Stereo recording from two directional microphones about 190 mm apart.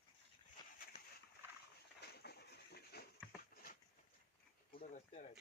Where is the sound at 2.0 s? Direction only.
60° left (ahead or behind).